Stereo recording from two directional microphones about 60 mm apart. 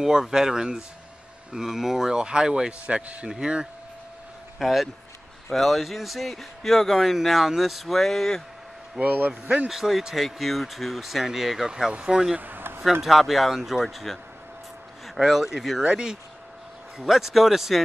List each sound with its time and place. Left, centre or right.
0.0 s speech: centre
4.6 s speech: centre
9.0 s a man's voice: right
9.7 s speech: centre
12.4 s a sound: right
13.0 s speech: centre
17.0 s speech: centre